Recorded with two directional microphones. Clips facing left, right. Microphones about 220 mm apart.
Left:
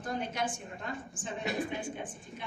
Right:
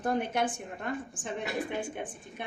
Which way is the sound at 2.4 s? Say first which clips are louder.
Right 4 dB; 60° right (ahead or behind).